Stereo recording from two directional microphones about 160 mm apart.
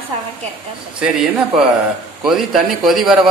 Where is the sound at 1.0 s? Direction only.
5° right (ahead or behind).